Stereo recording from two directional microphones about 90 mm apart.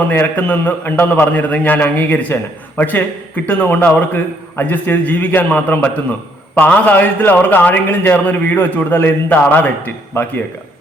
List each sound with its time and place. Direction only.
0.1 s a man's voice: 20° left (ahead or behind)